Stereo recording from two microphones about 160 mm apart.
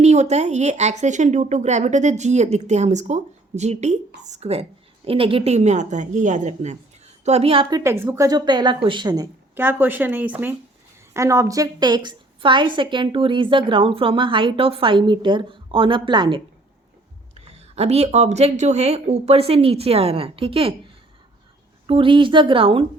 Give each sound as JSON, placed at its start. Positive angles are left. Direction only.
{"t": 0.0, "sound": "a woman's voice", "side_deg": -45}
{"t": 7.9, "sound": "a woman's voice", "side_deg": -15}
{"t": 9.6, "sound": "a woman's voice", "side_deg": -10}
{"t": 17.3, "sound": "a woman's voice", "side_deg": -40}
{"t": 21.8, "sound": "a woman's voice", "side_deg": -35}